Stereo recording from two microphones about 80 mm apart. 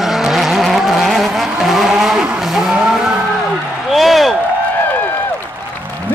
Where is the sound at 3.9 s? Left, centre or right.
Centre.